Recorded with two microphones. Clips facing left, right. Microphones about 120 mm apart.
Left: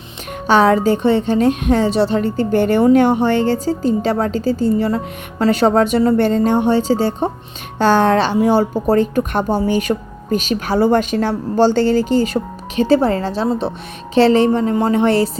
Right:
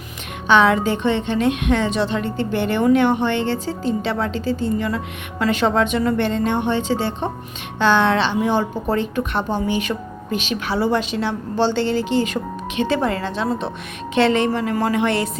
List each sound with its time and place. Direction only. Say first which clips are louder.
0.4 s speech: left 3 dB; 40° left (ahead or behind)